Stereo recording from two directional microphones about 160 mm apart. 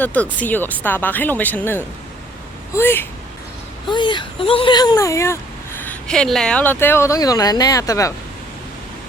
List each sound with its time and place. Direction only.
0.0 s speech: 10° left (ahead or behind)
3.8 s speech: 30° left (ahead or behind)
5.8 s speech: 5° left (ahead or behind)